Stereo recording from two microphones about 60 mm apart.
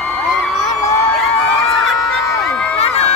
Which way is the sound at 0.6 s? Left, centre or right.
Left.